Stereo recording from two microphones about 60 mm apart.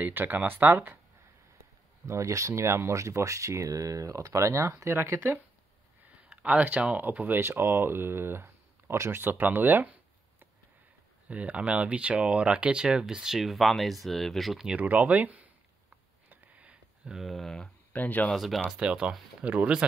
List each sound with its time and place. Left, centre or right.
0.0 s speech: right
2.0 s speech: right
6.0 s speech: right
7.3 s speech: right
9.2 s speech: right
11.2 s speech: right; by 14.7 s centre
14.7 s speech: right
16.3 s a sound: right
17.1 s speech: centre
17.6 s speech: left
18.3 s speech: centre
18.7 s speech: centre